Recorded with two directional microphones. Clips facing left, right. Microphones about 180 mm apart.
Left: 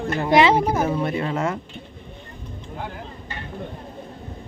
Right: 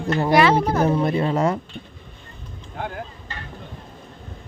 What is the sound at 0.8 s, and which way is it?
Speech, 35° right (ahead or behind).